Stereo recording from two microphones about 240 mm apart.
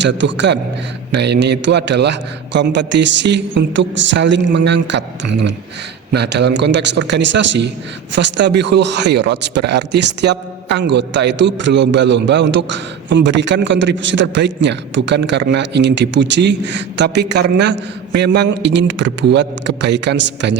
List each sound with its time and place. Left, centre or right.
0.0 s a man's voice: right